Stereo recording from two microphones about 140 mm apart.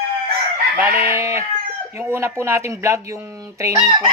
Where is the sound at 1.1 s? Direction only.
20° right (ahead or behind).